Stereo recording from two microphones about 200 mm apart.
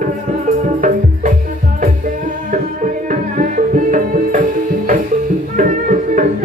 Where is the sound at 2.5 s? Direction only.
40° right (ahead or behind).